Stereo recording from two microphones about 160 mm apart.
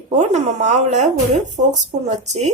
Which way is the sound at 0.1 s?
45° right (ahead or behind).